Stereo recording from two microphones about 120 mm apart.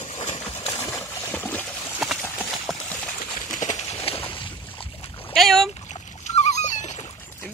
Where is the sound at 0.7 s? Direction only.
20° left (ahead or behind).